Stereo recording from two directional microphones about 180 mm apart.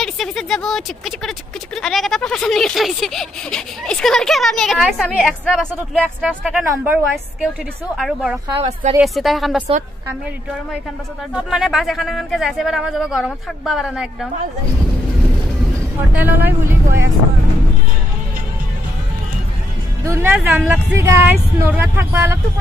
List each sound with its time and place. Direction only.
0.0 s speech: centre (ahead or behind)
5.8 s speech: 5° right (ahead or behind)
8.5 s a woman's voice: 35° right (ahead or behind)
9.0 s speech: centre (ahead or behind)
11.3 s speech: 5° right (ahead or behind)
16.1 s speech: 10° right (ahead or behind)
20.1 s speech: 10° right (ahead or behind)